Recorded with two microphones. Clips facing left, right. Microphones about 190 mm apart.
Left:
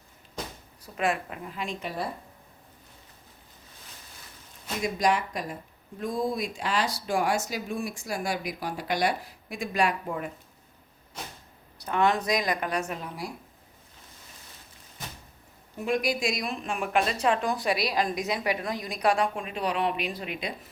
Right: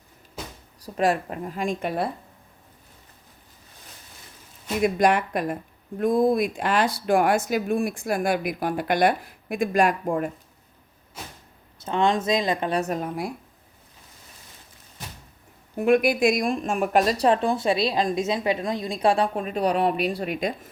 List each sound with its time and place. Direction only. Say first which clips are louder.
0.8 s speech: right 5 dB; 40° right (ahead or behind)
4.8 s speech: right 6 dB; 60° right (ahead or behind)
11.8 s speech: right 3 dB; 25° right (ahead or behind); by 13.3 s 50° right (ahead or behind)
15.8 s speech: right 8 dB; 60° right (ahead or behind)